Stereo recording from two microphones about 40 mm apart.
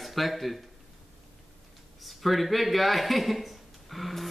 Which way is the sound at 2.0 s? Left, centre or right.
Centre.